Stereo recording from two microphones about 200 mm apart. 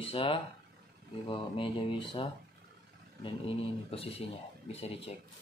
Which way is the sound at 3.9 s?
30° left (ahead or behind).